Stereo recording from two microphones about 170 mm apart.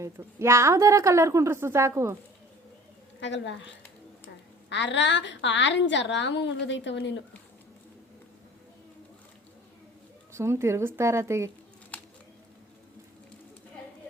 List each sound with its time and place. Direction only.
0.0 s a woman's voice: 15° right (ahead or behind)
3.2 s a woman's voice: 90° left
4.7 s a woman's voice: 90° left
10.3 s a woman's voice: 15° right (ahead or behind)